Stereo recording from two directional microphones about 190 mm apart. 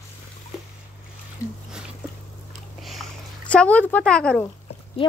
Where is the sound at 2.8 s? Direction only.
Centre (ahead or behind).